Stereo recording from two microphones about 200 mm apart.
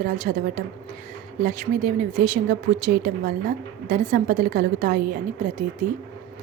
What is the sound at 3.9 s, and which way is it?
A woman's voice, 45° right (ahead or behind).